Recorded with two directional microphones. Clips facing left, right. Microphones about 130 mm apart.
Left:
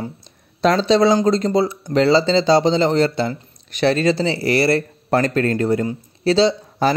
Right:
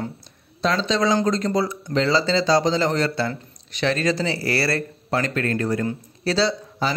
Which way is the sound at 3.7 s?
35° left (ahead or behind).